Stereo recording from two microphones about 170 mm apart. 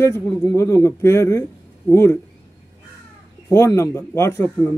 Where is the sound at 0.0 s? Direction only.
15° left (ahead or behind).